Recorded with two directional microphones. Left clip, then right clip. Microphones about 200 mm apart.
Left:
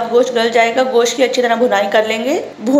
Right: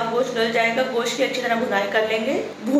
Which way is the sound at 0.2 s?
45° left (ahead or behind).